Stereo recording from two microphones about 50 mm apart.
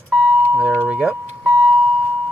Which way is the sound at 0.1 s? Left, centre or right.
Right.